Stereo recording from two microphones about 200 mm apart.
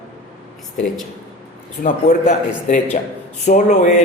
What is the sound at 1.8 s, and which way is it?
A man's voice, 40° left (ahead or behind).